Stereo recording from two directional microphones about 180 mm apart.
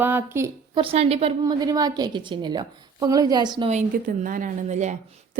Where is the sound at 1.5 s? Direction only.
20° right (ahead or behind).